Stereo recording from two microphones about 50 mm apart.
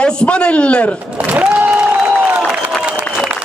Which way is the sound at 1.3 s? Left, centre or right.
Right.